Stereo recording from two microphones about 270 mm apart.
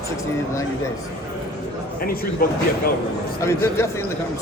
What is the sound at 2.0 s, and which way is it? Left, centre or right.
Speech, left.